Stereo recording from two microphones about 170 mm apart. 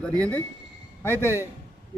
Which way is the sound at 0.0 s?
5° left (ahead or behind).